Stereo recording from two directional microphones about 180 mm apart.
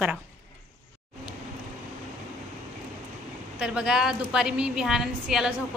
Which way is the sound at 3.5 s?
5° right (ahead or behind).